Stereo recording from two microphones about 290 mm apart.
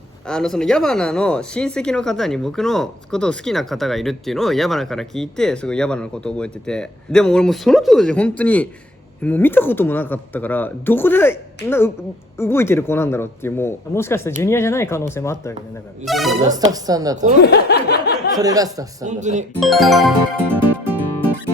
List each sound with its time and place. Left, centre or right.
0.3 s speech: centre
16.4 s speech: centre
17.4 s a sound: left
18.3 s speech: centre
19.0 s speech: right
19.5 s music: centre